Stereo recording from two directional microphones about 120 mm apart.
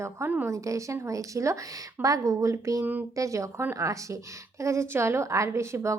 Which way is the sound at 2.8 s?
15° right (ahead or behind).